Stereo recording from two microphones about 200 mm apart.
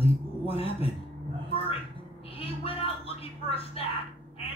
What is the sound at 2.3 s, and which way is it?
Speech, 30° left (ahead or behind).